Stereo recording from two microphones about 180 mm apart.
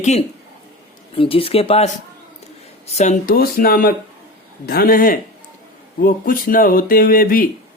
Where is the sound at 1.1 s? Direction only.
30° left (ahead or behind).